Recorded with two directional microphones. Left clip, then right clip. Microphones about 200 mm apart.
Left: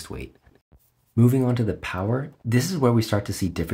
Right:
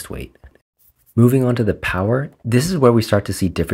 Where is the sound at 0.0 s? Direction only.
25° right (ahead or behind).